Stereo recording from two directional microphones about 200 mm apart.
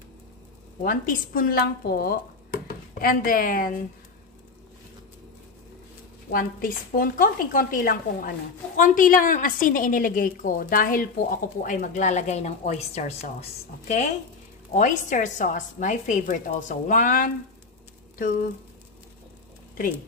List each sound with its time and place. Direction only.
0.8 s speech: 45° left (ahead or behind)
6.3 s a woman's voice: 45° left (ahead or behind)